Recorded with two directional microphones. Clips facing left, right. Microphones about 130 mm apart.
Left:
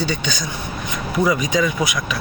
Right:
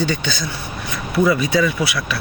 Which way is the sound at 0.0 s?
15° left (ahead or behind).